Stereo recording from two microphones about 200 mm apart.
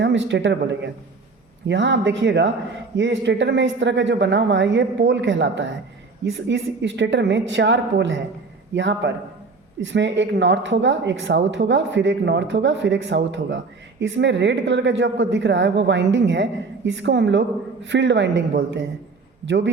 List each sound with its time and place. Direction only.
0.0 s a woman's voice: 65° right (ahead or behind)